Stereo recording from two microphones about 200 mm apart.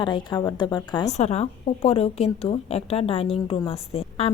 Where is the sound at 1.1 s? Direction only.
35° left (ahead or behind).